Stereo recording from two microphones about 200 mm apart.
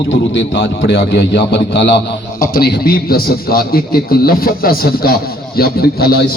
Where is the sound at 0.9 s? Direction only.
60° left (ahead or behind).